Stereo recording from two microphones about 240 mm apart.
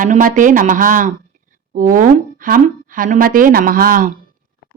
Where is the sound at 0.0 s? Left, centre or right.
Right.